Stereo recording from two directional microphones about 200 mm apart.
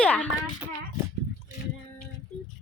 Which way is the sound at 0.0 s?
5° left (ahead or behind).